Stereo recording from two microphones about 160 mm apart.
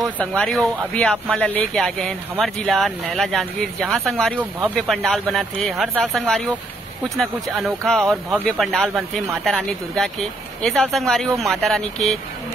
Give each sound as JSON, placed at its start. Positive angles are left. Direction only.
{"t": 0.2, "sound": "speech", "side_deg": 5}
{"t": 4.4, "sound": "speech", "side_deg": -10}
{"t": 4.7, "sound": "speech", "side_deg": 0}